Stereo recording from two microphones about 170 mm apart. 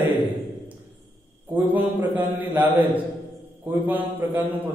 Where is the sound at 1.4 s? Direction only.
10° right (ahead or behind).